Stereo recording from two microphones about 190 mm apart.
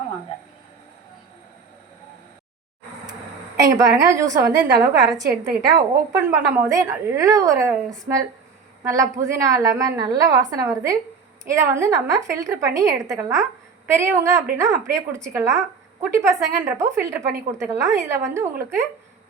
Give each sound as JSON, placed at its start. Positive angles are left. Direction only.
{"t": 3.6, "sound": "a woman's voice", "side_deg": -15}